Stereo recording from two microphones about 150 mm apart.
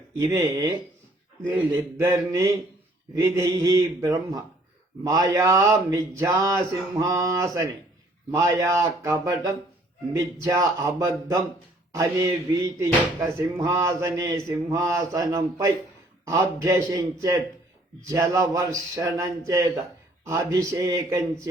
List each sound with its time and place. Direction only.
0.2 s speech: 20° right (ahead or behind)
2.0 s speech: 20° right (ahead or behind)